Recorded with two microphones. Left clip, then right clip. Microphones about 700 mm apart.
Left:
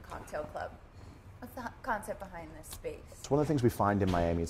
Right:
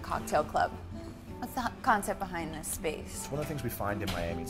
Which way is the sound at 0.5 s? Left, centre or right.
Right.